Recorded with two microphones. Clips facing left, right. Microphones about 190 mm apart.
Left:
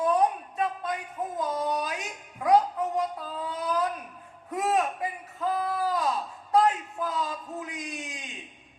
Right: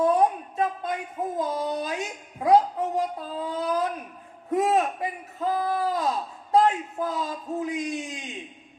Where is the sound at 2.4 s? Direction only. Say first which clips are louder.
Right 3 dB; 30° right (ahead or behind).